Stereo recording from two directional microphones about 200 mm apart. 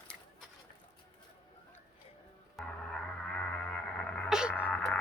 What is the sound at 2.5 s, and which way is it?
Music, 5° left (ahead or behind).